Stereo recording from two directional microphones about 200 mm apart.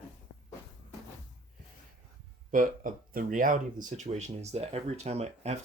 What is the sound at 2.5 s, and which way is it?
Speech, 40° right (ahead or behind).